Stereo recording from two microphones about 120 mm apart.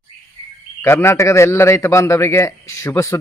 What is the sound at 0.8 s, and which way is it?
A man's voice, 20° left (ahead or behind).